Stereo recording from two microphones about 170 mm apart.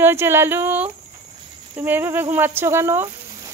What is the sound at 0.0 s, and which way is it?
Speech, 15° right (ahead or behind).